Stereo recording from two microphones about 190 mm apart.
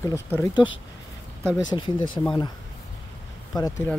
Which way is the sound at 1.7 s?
25° left (ahead or behind).